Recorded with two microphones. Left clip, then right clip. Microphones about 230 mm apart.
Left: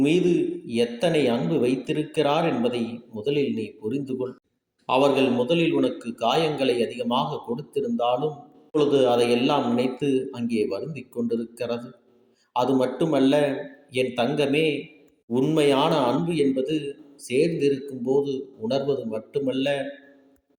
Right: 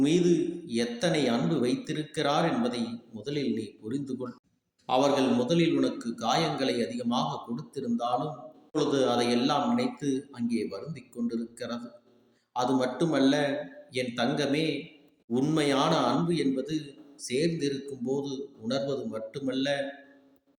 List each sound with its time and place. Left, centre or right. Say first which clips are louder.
0.0 s speech: left 4 dB; centre